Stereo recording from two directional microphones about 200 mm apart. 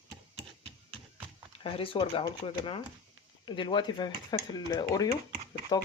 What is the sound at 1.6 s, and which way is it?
Speech, 25° left (ahead or behind).